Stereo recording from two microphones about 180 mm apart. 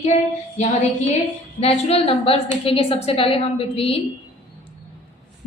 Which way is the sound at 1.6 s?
35° left (ahead or behind).